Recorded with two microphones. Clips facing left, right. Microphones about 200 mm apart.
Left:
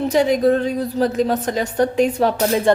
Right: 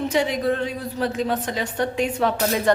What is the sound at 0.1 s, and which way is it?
A woman's voice, 40° left (ahead or behind).